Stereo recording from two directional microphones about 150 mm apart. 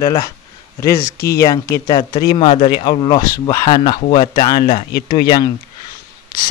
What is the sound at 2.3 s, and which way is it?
Speech, 45° left (ahead or behind).